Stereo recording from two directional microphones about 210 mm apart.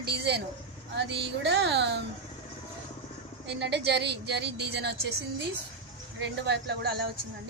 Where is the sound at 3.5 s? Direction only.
55° right (ahead or behind).